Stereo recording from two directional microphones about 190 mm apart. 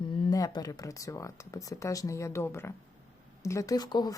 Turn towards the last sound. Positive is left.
turn(degrees=20)  # may be behind; listen again after turning